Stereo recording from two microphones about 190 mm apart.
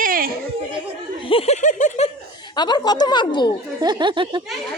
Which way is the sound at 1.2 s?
30° left (ahead or behind).